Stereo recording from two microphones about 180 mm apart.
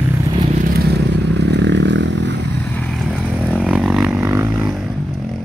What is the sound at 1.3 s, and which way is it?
Vehicle, 75° right (ahead or behind).